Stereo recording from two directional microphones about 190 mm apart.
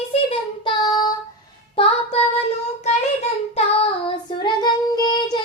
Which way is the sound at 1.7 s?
30° left (ahead or behind).